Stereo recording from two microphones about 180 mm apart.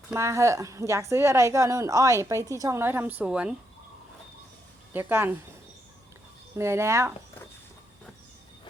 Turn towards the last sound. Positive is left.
turn(degrees=-15)  # may be behind; listen again after turning